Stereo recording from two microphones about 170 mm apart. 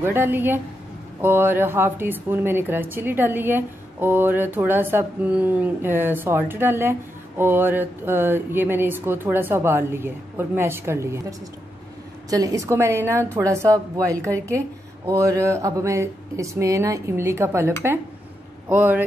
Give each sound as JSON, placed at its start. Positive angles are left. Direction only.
{"t": 0.0, "sound": "a woman's voice", "side_deg": -10}